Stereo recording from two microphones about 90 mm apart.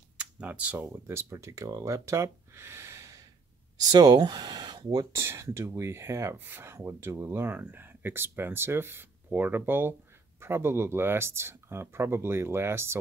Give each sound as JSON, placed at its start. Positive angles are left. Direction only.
{"t": 0.2, "sound": "speech", "side_deg": -15}
{"t": 0.9, "sound": "speech", "side_deg": -30}
{"t": 3.8, "sound": "speech", "side_deg": -45}
{"t": 5.1, "sound": "speech", "side_deg": -30}